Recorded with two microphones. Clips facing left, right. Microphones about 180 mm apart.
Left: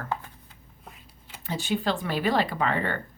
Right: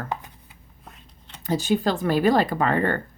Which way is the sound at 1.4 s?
40° right (ahead or behind).